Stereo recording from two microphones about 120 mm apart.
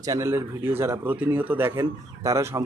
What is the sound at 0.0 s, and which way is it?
A man's voice, 25° right (ahead or behind).